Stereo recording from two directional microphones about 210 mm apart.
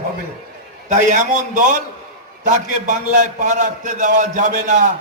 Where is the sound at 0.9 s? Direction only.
35° right (ahead or behind).